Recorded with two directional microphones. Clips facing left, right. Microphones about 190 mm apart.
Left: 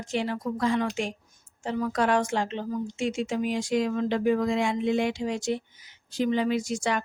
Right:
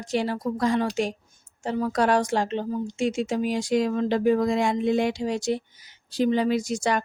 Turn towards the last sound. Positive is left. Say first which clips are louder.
# right 3 dB
turn(degrees=-40)  # may be behind; listen again after turning